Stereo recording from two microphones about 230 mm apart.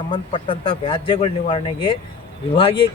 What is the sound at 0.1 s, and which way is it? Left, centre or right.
Speech, left.